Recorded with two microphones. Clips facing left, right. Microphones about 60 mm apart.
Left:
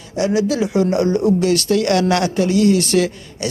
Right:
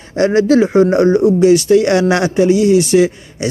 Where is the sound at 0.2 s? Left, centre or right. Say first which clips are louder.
Right 7 dB; right.